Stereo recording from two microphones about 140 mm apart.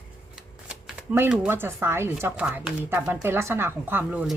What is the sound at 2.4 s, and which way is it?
Speech, 5° right (ahead or behind).